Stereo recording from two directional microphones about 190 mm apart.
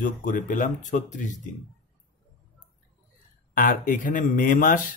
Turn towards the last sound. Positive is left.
turn(degrees=45)  # may be behind; listen again after turning